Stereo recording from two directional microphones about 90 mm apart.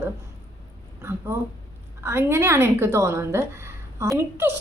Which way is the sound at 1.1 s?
30° right (ahead or behind).